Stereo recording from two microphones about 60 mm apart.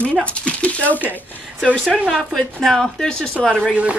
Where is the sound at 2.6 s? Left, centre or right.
Centre.